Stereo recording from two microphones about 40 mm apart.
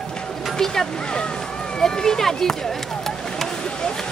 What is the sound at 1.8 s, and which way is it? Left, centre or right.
Speech, centre.